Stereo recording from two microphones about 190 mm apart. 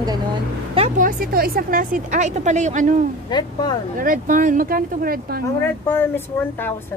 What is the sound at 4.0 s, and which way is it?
Speech, 45° right (ahead or behind).